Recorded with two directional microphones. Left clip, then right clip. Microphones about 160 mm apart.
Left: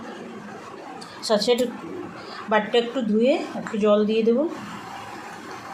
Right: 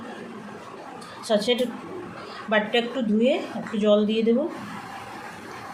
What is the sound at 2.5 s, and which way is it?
A woman's voice, 20° left (ahead or behind).